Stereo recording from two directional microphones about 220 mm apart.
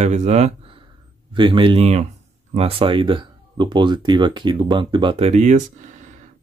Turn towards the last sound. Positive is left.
turn(degrees=-35)  # may be behind; listen again after turning